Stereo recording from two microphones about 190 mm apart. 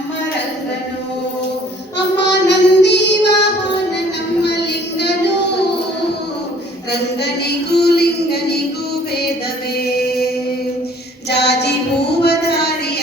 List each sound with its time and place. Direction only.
2.3 s female singing: 65° left (ahead or behind)
4.4 s child singing: 65° left (ahead or behind)
7.2 s a sound: 60° left (ahead or behind)
9.7 s chant: 55° left (ahead or behind)
11.3 s female singing: 60° left (ahead or behind)